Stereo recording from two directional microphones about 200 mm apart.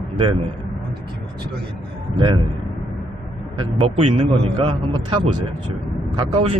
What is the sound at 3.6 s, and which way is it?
Speech, 25° right (ahead or behind).